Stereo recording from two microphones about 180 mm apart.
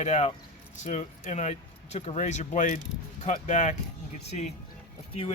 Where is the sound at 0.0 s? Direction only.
40° left (ahead or behind).